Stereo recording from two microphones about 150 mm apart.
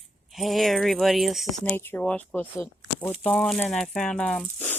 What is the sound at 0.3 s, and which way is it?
Speech, centre (ahead or behind).